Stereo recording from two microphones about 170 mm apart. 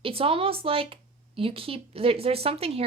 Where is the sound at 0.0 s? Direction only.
35° right (ahead or behind).